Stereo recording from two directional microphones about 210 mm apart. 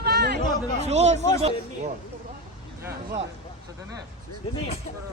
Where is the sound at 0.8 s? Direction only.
30° right (ahead or behind).